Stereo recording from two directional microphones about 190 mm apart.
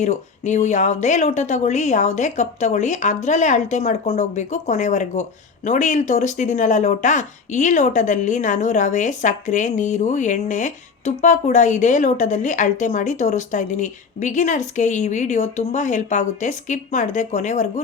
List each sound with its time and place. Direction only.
0.0 s speech: 40° left (ahead or behind)